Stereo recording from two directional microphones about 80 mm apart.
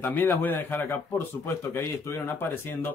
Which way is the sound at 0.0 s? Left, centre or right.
Left.